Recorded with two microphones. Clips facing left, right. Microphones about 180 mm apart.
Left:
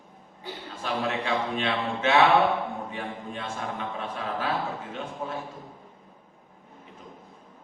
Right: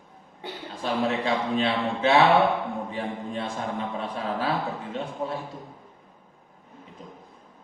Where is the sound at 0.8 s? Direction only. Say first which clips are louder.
Right 3 dB; 35° right (ahead or behind).